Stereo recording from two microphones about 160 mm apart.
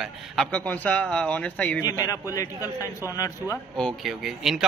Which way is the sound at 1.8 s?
20° left (ahead or behind).